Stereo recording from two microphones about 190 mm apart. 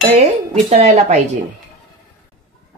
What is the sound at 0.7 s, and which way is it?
Speech, 35° right (ahead or behind).